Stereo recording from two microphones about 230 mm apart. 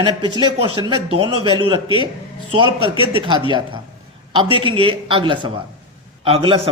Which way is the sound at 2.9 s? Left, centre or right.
Left.